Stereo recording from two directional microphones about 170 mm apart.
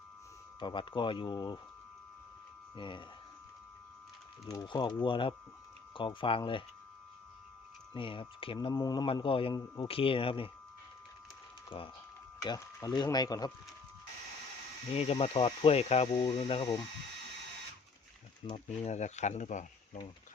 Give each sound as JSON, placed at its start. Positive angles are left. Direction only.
{"t": 0.6, "sound": "speech", "side_deg": 30}
{"t": 2.7, "sound": "speech", "side_deg": 30}
{"t": 4.4, "sound": "speech", "side_deg": 25}
{"t": 7.9, "sound": "speech", "side_deg": 30}
{"t": 12.4, "sound": "speech", "side_deg": 20}
{"t": 14.9, "sound": "speech", "side_deg": 35}
{"t": 18.4, "sound": "speech", "side_deg": 35}